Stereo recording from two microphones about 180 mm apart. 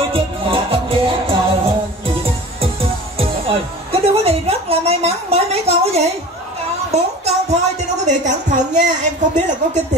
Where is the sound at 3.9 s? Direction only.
35° right (ahead or behind).